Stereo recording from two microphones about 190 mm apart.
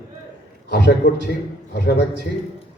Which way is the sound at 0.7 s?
60° left (ahead or behind).